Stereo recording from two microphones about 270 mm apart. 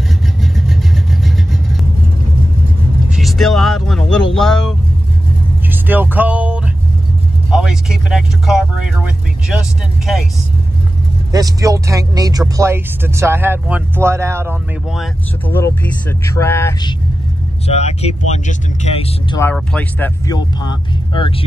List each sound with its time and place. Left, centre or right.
0.4 s vehicle: centre
3.1 s speech: centre
11.3 s speech: centre
17.6 s speech: left
19.4 s speech: centre